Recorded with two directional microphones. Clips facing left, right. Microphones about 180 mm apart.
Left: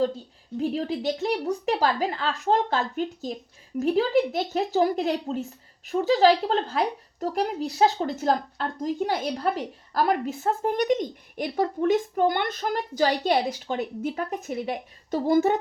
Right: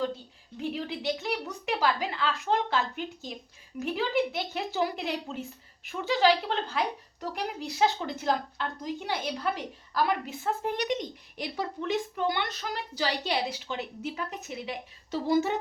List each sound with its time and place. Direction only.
0.5 s speech: 40° left (ahead or behind)